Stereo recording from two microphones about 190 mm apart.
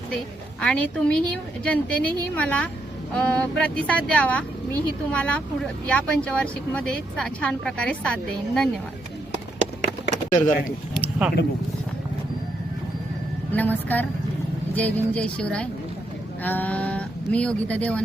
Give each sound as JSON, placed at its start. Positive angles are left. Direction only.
{"t": 0.6, "sound": "speech", "side_deg": 5}
{"t": 10.4, "sound": "speech", "side_deg": 45}
{"t": 10.9, "sound": "a sound", "side_deg": -5}
{"t": 13.5, "sound": "speech", "side_deg": 10}